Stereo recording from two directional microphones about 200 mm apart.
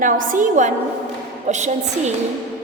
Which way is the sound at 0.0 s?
40° right (ahead or behind).